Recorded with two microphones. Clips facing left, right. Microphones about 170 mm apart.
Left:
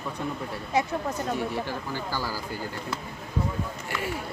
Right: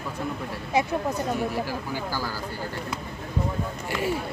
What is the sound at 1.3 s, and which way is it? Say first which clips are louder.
Speech: right 2 dB; centre (ahead or behind).